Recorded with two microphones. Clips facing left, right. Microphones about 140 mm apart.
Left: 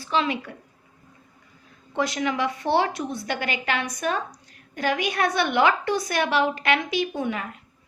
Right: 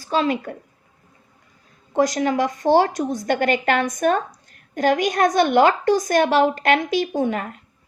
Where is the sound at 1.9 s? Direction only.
40° right (ahead or behind).